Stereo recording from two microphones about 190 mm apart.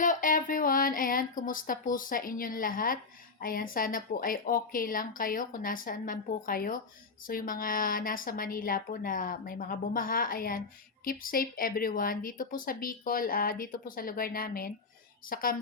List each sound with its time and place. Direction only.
0.0 s speech: 45° left (ahead or behind)